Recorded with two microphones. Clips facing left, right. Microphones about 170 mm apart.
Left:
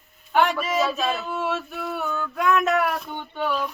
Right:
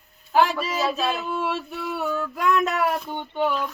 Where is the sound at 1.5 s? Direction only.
30° right (ahead or behind).